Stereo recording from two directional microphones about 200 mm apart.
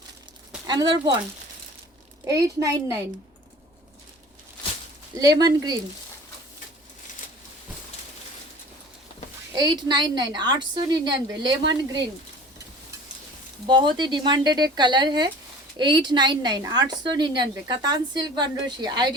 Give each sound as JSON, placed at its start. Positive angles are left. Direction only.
{"t": 0.7, "sound": "a woman's voice", "side_deg": -20}
{"t": 2.2, "sound": "a woman's voice", "side_deg": -15}
{"t": 5.1, "sound": "a woman's voice", "side_deg": -20}
{"t": 9.5, "sound": "a woman's voice", "side_deg": -20}
{"t": 13.7, "sound": "a woman's voice", "side_deg": -25}